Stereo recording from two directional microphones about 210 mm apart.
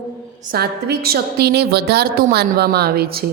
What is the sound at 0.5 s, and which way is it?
A woman's voice, 50° right (ahead or behind).